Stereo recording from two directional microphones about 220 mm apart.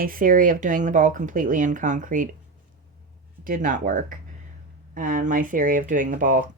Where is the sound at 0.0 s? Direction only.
40° right (ahead or behind).